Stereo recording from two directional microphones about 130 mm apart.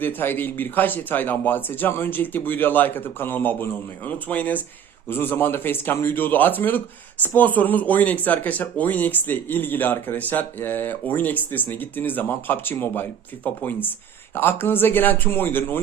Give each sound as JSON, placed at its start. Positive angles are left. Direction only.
{"t": 0.0, "sound": "speech", "side_deg": 15}